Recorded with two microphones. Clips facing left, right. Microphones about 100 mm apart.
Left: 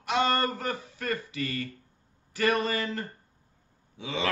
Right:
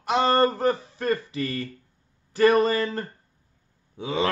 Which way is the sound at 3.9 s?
45° right (ahead or behind).